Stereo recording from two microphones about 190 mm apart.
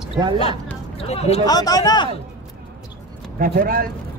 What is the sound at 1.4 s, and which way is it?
Speech, 20° left (ahead or behind).